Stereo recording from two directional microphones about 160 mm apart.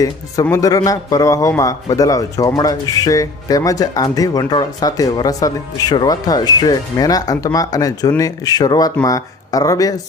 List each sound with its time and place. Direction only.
0.4 s a man's voice: 20° left (ahead or behind)